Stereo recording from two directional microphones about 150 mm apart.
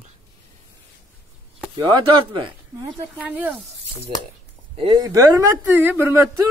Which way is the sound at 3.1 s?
10° right (ahead or behind).